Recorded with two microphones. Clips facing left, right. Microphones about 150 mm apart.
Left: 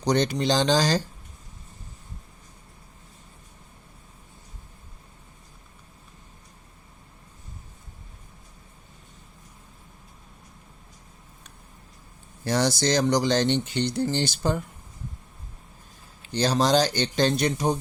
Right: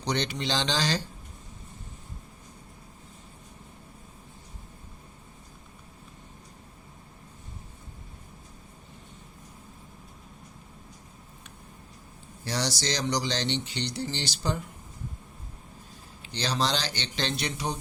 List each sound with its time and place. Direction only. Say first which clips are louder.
0.0 s speech: left 7 dB; 45° left (ahead or behind)
12.5 s speech: left 7 dB; 50° left (ahead or behind)
16.2 s speech: left 6 dB; 45° left (ahead or behind)